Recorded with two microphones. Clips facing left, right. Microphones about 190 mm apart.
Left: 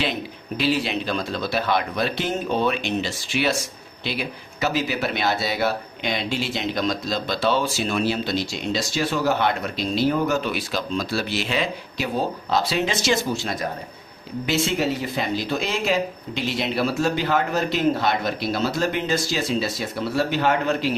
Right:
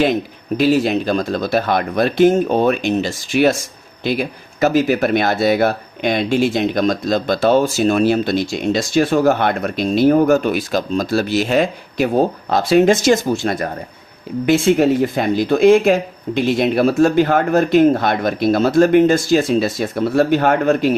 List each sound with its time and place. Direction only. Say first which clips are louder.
0.0 s speech: right 10 dB; 45° right (ahead or behind)